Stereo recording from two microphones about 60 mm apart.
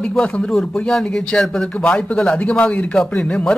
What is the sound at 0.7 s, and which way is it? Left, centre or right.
A man's voice, centre.